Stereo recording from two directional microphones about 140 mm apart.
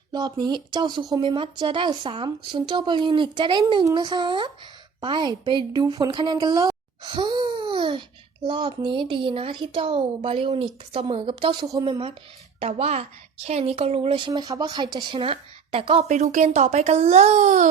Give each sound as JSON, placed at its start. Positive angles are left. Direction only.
{"t": 0.1, "sound": "a woman's voice", "side_deg": -30}
{"t": 11.7, "sound": "a woman's voice", "side_deg": -25}
{"t": 12.5, "sound": "a woman's voice", "side_deg": -50}
{"t": 16.0, "sound": "a child's voice", "side_deg": -60}